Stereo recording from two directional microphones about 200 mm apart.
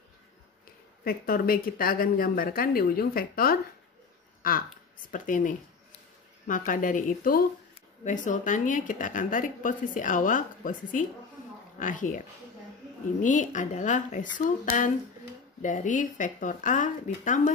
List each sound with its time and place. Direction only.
1.0 s speech: 45° left (ahead or behind)
13.2 s speech: 40° left (ahead or behind)